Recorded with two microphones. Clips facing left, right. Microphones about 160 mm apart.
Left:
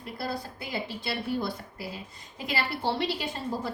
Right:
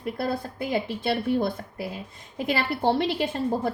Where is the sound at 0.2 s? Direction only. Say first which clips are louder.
Right 4 dB; 50° right (ahead or behind).